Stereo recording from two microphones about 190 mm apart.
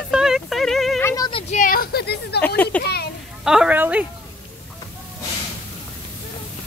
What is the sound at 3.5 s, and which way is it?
Speech, 5° right (ahead or behind).